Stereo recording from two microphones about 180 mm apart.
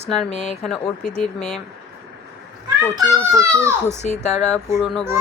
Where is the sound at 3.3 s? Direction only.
15° right (ahead or behind).